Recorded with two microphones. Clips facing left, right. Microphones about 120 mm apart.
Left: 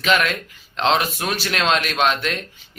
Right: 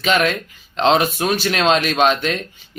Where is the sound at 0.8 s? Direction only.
20° right (ahead or behind).